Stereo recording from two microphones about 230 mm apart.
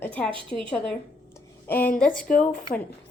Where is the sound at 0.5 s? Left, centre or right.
Left.